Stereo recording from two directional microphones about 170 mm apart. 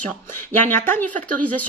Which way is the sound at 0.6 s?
10° left (ahead or behind).